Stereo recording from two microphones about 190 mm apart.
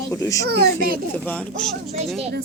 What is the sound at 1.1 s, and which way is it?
Speech, 5° left (ahead or behind).